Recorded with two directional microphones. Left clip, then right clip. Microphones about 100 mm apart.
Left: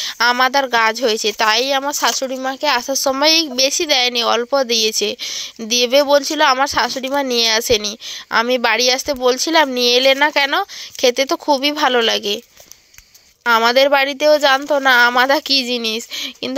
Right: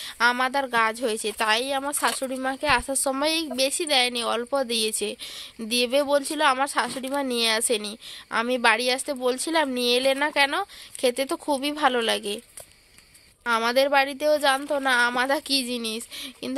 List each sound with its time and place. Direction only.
0.0 s speech: 30° left (ahead or behind)
13.5 s a woman's voice: 35° left (ahead or behind)